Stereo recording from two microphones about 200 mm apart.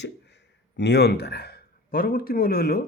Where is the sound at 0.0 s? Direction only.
60° left (ahead or behind).